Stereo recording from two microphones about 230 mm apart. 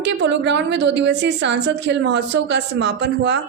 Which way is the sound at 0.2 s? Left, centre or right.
Right.